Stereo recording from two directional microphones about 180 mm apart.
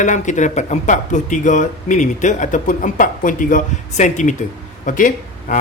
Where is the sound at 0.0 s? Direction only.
45° left (ahead or behind).